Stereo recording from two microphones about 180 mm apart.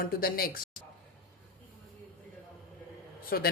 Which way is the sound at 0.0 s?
55° left (ahead or behind).